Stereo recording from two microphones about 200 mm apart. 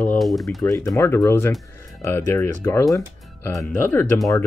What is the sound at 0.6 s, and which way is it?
Speech, 15° left (ahead or behind).